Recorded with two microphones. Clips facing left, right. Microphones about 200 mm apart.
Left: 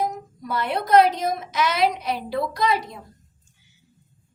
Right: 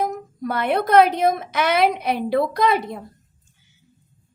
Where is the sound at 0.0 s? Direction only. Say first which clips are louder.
Right 3 dB; 55° right (ahead or behind).